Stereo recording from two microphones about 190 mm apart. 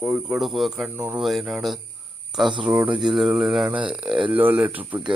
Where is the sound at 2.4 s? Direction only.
25° right (ahead or behind).